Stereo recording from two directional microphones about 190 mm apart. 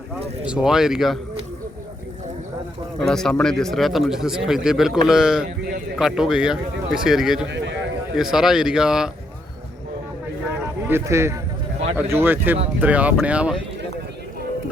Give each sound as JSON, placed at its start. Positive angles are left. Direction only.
{"t": 0.4, "sound": "speech", "side_deg": -5}
{"t": 3.0, "sound": "speech", "side_deg": 0}
{"t": 7.4, "sound": "a man's voice", "side_deg": -70}
{"t": 8.1, "sound": "speech", "side_deg": -5}
{"t": 10.8, "sound": "speech", "side_deg": -15}